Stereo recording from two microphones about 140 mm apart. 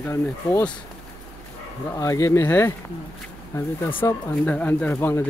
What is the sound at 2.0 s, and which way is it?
Speech, 20° left (ahead or behind).